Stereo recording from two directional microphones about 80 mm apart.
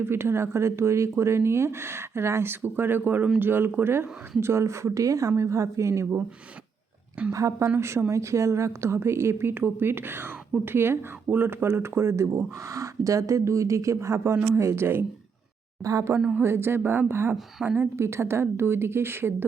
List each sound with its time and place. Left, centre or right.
0.0 s speech: right
7.3 s speech: right
15.8 s speech: right
16.3 s speech: right